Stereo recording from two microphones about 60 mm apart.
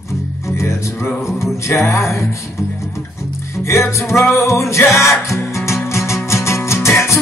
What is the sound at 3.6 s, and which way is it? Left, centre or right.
Music, left.